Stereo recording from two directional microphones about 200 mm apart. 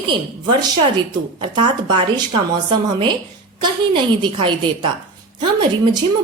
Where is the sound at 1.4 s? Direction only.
25° right (ahead or behind).